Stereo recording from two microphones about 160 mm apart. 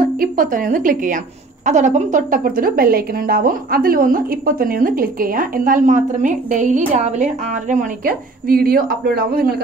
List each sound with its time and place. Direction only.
0.0 s a woman's voice: 60° right (ahead or behind)